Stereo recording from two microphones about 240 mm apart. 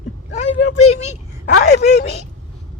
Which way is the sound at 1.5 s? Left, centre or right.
Left.